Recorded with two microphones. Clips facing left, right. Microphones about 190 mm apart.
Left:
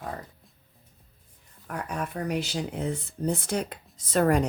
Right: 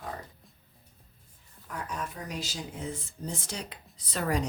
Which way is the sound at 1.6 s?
60° left (ahead or behind).